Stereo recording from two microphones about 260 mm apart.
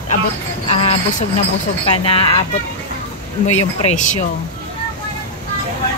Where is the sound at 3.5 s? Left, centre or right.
Left.